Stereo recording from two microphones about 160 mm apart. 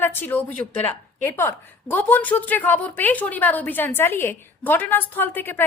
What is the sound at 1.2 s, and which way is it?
A woman's voice, 15° left (ahead or behind).